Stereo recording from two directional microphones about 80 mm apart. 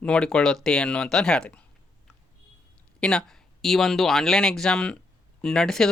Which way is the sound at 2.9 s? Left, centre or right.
Centre.